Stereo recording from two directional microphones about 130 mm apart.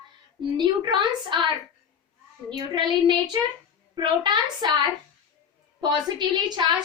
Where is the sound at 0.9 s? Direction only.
35° right (ahead or behind).